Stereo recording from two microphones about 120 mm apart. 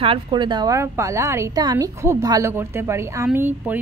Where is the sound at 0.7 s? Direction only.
25° right (ahead or behind).